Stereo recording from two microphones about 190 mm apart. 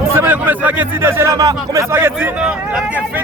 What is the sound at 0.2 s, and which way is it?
Speech, 10° right (ahead or behind).